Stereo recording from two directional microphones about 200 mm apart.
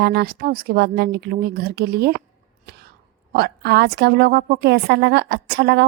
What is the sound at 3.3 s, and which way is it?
A woman's voice, 55° right (ahead or behind).